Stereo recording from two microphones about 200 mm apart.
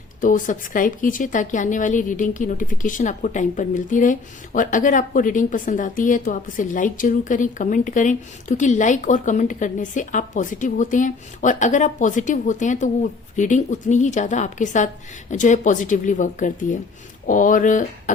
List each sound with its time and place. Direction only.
0.2 s a woman's voice: 40° left (ahead or behind)